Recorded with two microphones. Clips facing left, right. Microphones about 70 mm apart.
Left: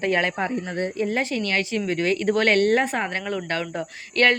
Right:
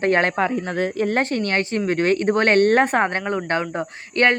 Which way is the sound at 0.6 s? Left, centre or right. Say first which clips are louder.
Right 4 dB; right.